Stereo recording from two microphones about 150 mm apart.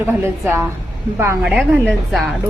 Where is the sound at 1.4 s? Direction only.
Centre (ahead or behind).